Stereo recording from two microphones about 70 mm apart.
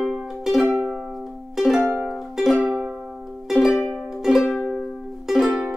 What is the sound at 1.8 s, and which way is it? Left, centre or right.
Music, right.